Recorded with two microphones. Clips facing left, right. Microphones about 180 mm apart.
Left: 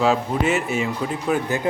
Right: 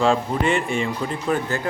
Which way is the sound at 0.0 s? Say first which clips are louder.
Even; 5° left (ahead or behind).